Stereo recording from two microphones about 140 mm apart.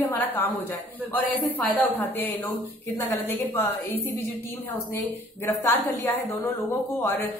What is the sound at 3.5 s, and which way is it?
Speech, 15° left (ahead or behind).